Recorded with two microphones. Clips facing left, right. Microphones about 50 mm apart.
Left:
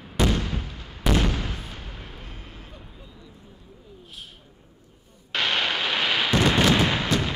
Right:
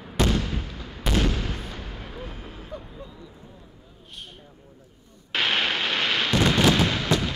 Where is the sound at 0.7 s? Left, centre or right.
Centre.